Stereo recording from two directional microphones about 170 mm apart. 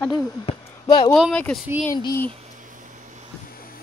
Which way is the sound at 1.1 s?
5° left (ahead or behind).